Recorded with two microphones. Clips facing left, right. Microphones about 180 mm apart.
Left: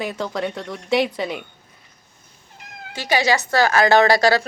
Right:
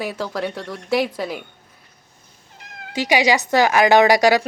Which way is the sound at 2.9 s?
15° right (ahead or behind).